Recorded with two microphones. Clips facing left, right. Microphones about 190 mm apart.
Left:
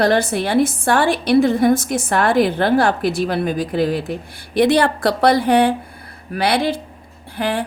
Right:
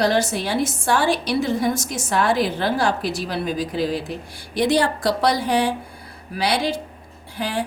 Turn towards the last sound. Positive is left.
turn(degrees=55)  # may be behind; listen again after turning